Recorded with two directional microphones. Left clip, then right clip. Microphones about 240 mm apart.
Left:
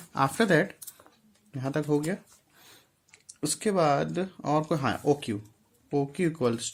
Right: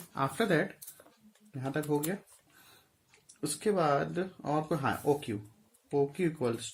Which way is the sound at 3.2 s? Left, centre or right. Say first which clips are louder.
Left 2 dB; left.